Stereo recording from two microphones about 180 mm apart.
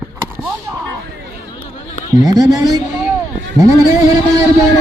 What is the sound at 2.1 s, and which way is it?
Speech, 20° right (ahead or behind).